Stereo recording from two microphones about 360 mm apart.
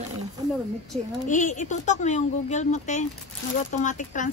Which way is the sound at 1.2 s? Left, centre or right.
Left.